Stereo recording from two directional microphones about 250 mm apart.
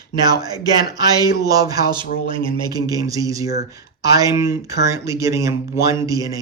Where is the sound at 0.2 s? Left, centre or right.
Centre.